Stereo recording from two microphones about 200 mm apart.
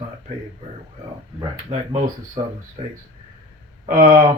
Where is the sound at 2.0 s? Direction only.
40° right (ahead or behind).